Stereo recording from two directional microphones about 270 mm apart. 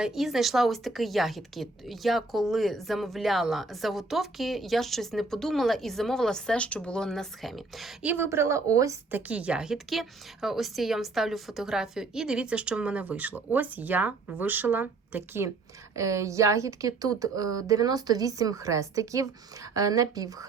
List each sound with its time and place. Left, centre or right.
0.0 s a woman's voice: centre